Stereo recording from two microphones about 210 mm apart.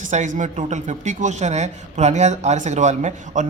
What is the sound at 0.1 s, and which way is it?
A man's voice, 35° right (ahead or behind).